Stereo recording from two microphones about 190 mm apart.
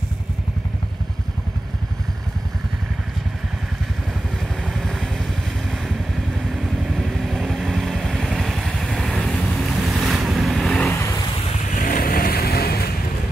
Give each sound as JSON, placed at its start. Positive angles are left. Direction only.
{"t": 4.6, "sound": "vehicle", "side_deg": 0}
{"t": 6.5, "sound": "vehicle", "side_deg": 0}
{"t": 11.7, "sound": "vehicle", "side_deg": 45}